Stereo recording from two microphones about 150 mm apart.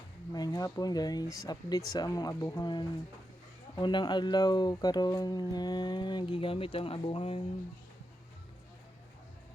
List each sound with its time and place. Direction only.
0.3 s speech: 25° left (ahead or behind)